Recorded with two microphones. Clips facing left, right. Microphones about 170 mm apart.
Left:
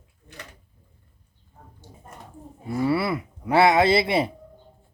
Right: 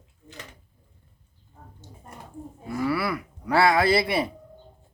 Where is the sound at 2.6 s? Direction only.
25° left (ahead or behind).